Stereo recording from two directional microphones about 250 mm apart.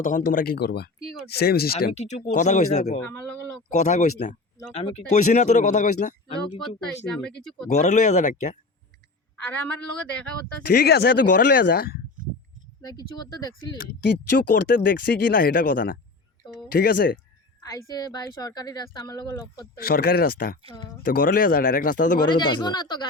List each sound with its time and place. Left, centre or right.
0.0 s speech: left
1.9 s speech: left
3.0 s a man's voice: centre
3.7 s speech: left
6.8 s a man's voice: centre
7.7 s speech: left
9.4 s a man's voice: centre
10.7 s speech: left
12.8 s speech: centre
14.5 s speech: left
17.6 s speech: centre
19.8 s speech: left
22.2 s speech: centre